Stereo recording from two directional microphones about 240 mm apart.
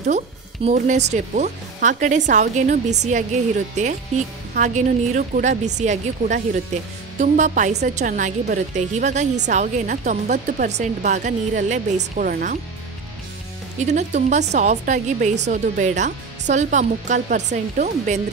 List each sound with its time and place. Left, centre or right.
0.7 s a woman's voice: right
13.7 s a woman's voice: right